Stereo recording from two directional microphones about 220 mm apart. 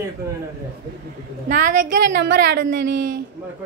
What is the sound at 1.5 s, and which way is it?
Speech, 40° right (ahead or behind).